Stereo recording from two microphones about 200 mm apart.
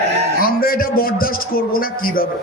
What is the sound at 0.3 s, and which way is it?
A man's voice, 45° left (ahead or behind).